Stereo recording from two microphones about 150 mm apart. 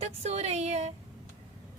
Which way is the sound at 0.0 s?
45° right (ahead or behind).